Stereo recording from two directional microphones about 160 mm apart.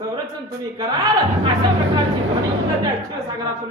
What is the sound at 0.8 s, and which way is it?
Speech, 25° right (ahead or behind).